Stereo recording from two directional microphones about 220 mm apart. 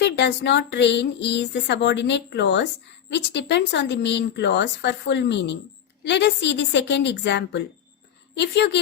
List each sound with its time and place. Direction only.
0.0 s speech: 50° left (ahead or behind)